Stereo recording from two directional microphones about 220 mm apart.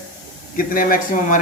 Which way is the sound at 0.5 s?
40° left (ahead or behind).